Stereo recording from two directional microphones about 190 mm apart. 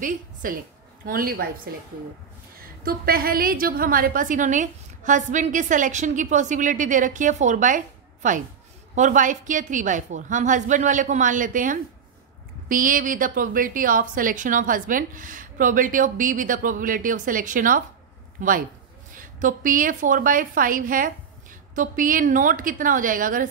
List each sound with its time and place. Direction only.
0.0 s a woman's voice: 45° right (ahead or behind)